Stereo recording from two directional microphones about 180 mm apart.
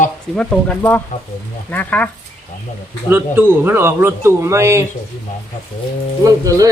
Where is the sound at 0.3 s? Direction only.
5° left (ahead or behind).